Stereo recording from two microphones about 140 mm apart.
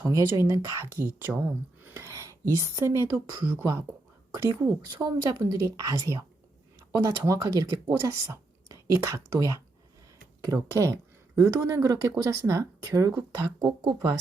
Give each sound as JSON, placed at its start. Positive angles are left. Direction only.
{"t": 0.0, "sound": "a woman's voice", "side_deg": -20}